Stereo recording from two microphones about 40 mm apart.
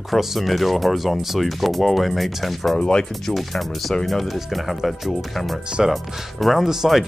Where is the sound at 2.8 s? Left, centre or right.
Left.